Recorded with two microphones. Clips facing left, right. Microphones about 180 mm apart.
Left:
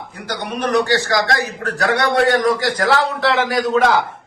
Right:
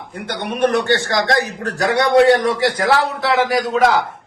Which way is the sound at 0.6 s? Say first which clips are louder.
Right 1 dB; 25° right (ahead or behind).